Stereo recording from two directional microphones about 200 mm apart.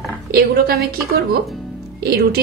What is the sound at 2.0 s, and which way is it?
Speech, 50° right (ahead or behind).